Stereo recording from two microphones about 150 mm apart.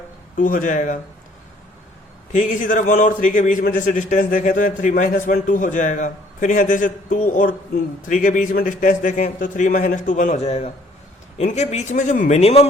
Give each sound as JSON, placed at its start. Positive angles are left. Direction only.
{"t": 0.3, "sound": "a man's voice", "side_deg": 60}
{"t": 2.3, "sound": "a man's voice", "side_deg": 55}